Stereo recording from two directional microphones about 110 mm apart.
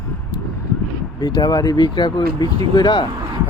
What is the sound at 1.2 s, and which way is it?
Speech, 40° left (ahead or behind).